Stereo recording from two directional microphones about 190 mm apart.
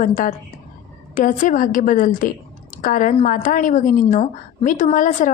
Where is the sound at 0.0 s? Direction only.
45° left (ahead or behind).